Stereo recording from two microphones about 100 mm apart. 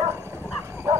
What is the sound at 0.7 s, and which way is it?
Bow-wow, 25° right (ahead or behind).